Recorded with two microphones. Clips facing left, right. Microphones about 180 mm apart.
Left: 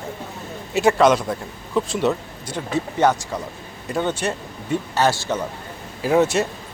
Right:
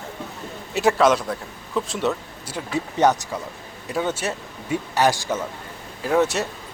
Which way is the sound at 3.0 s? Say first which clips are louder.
Even; 20° right (ahead or behind).